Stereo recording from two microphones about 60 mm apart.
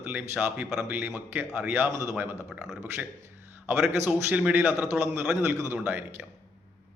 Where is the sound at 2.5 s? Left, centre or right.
Centre.